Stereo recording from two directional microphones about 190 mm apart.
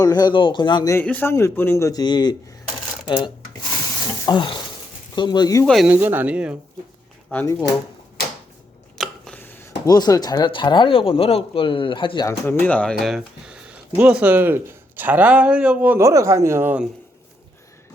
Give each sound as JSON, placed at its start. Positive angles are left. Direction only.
{"t": 0.0, "sound": "speech", "side_deg": 20}
{"t": 0.9, "sound": "a man's voice", "side_deg": 10}
{"t": 5.6, "sound": "speech", "side_deg": 0}
{"t": 7.3, "sound": "speech", "side_deg": 10}
{"t": 9.0, "sound": "speech", "side_deg": 5}
{"t": 12.5, "sound": "speech", "side_deg": 10}